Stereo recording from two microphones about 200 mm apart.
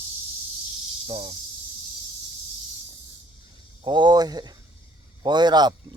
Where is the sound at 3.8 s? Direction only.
20° right (ahead or behind).